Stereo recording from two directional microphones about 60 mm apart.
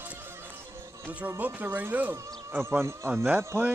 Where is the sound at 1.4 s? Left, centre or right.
Right.